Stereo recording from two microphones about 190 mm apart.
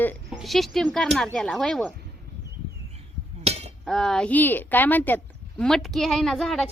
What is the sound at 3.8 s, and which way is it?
Speech, centre (ahead or behind).